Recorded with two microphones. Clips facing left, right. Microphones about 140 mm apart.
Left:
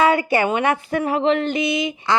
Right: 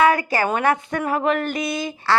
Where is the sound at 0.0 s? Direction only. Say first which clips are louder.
Left 1 dB; 25° left (ahead or behind).